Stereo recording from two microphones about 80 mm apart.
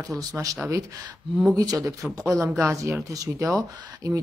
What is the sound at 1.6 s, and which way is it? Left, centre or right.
Speech, right.